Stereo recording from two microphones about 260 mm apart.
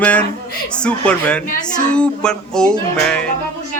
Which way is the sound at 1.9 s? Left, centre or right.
Centre.